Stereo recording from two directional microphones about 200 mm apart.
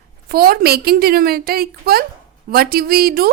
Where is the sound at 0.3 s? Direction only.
50° right (ahead or behind).